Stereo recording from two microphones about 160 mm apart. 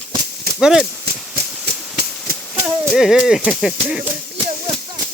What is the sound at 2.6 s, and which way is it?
Speech, 15° right (ahead or behind).